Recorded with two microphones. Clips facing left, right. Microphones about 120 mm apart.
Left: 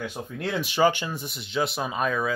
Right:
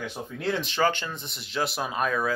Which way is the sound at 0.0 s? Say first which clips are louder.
Even; centre (ahead or behind).